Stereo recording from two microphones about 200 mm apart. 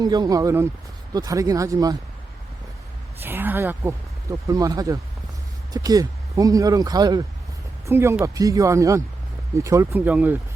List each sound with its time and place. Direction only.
0.0 s speech: 20° right (ahead or behind)
3.2 s speech: 10° right (ahead or behind)